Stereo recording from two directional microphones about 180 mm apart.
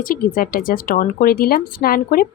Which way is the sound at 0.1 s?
50° left (ahead or behind).